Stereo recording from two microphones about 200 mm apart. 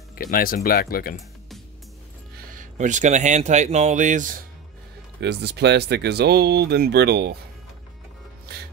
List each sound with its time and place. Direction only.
0.1 s speech: 50° left (ahead or behind)
2.3 s speech: 40° right (ahead or behind)
5.2 s speech: 55° right (ahead or behind)